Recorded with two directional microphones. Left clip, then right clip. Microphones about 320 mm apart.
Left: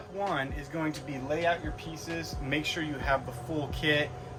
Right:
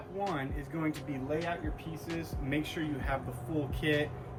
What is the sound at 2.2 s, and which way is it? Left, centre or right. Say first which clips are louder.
Speech: left 3 dB; centre.